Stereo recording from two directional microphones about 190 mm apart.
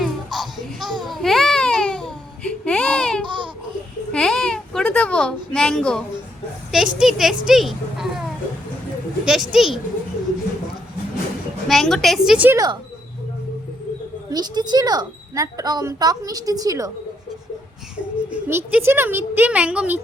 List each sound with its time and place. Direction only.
0.0 s babbling: centre (ahead or behind)
3.2 s babbling: 25° right (ahead or behind)
4.1 s a sound: 5° left (ahead or behind)
6.7 s speech: centre (ahead or behind)
9.2 s a woman's voice: centre (ahead or behind)
11.7 s a woman's voice: centre (ahead or behind)
14.3 s speech: 20° right (ahead or behind)
17.9 s a woman's voice: 5° right (ahead or behind)